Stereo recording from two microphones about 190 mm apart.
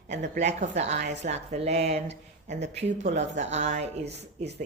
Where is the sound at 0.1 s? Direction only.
40° right (ahead or behind).